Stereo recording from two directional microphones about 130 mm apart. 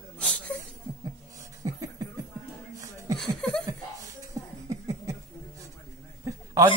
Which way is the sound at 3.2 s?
5° left (ahead or behind).